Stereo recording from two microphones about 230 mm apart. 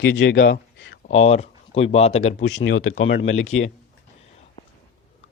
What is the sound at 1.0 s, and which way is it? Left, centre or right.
Speech, left.